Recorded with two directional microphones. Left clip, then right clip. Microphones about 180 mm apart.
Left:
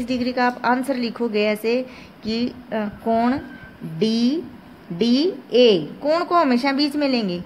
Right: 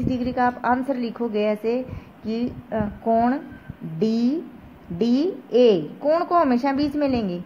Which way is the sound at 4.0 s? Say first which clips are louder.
Left 2 dB; 30° right (ahead or behind).